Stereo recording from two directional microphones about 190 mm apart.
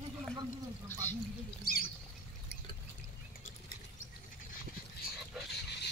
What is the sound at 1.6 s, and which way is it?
Rodents, 50° left (ahead or behind).